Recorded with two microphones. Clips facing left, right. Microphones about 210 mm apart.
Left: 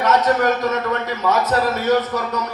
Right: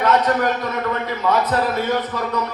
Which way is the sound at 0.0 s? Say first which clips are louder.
Left 1 dB; 45° left (ahead or behind).